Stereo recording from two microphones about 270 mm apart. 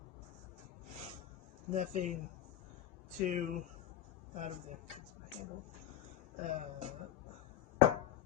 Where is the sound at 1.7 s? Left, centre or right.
Right.